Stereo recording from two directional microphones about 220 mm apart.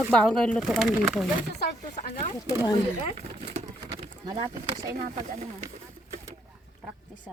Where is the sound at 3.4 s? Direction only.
25° right (ahead or behind).